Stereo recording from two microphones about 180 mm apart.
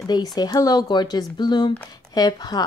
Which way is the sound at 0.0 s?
20° left (ahead or behind).